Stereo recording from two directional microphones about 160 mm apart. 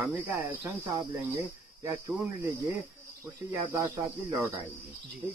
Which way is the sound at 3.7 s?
20° right (ahead or behind).